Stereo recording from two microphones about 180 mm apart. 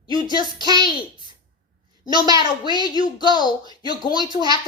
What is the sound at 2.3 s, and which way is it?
Speech, 25° left (ahead or behind).